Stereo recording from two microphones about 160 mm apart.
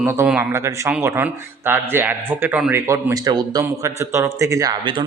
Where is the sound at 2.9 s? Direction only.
20° right (ahead or behind).